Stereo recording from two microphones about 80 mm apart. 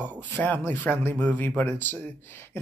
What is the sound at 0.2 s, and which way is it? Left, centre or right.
Speech, left.